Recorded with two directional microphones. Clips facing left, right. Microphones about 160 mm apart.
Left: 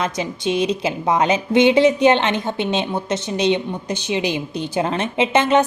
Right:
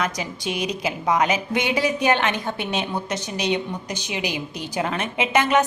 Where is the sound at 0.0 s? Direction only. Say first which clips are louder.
Left 4 dB; 25° left (ahead or behind).